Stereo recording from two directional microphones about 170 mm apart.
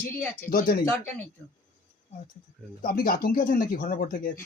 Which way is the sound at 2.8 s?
55° left (ahead or behind).